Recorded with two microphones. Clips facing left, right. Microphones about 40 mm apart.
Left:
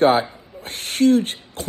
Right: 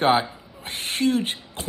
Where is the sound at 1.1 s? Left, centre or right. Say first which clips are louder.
Left 5 dB; right.